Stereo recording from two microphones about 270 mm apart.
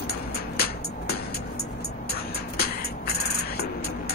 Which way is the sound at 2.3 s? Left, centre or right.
Left.